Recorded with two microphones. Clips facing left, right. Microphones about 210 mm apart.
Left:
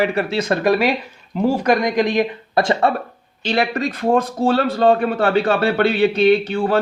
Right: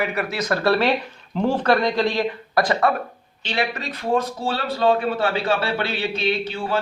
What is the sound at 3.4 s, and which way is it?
A man's voice, 45° left (ahead or behind).